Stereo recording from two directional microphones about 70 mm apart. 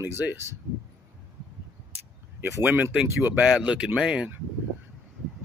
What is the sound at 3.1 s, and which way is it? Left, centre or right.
Speech, right.